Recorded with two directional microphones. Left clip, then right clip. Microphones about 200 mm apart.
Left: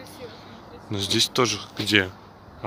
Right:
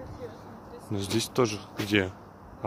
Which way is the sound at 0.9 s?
5° right (ahead or behind).